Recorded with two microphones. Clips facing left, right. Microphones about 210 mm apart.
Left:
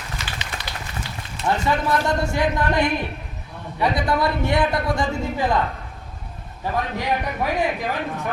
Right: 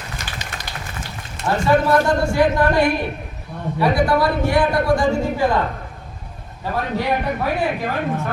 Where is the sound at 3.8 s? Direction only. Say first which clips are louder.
Right 4 dB; 20° left (ahead or behind).